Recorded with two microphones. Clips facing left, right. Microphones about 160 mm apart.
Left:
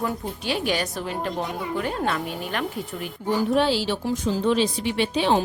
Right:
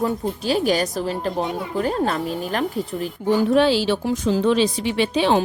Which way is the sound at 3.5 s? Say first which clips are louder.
Right 4 dB; 85° right.